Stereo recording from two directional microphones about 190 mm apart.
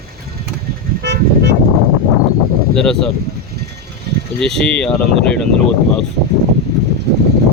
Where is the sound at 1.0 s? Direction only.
65° right (ahead or behind).